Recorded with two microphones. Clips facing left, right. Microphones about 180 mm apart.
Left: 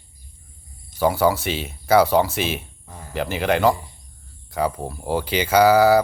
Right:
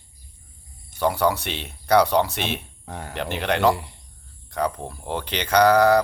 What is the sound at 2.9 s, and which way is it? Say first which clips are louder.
Speech: right 6 dB; 75° right (ahead or behind).